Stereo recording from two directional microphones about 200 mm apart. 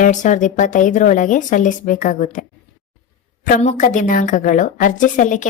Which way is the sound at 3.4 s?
40° left (ahead or behind).